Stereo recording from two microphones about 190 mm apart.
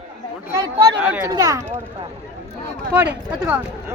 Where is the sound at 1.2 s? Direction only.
20° right (ahead or behind).